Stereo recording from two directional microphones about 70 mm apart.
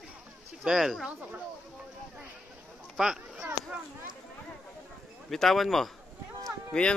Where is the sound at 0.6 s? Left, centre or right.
Centre.